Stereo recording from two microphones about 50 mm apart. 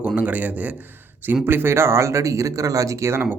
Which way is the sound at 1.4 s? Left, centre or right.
Right.